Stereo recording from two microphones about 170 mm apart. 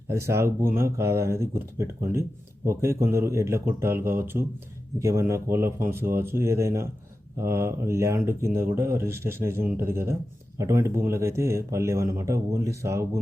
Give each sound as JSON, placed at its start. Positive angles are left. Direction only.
{"t": 0.1, "sound": "speech", "side_deg": -15}